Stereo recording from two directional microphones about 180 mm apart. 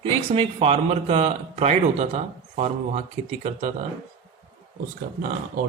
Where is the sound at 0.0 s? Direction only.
30° right (ahead or behind).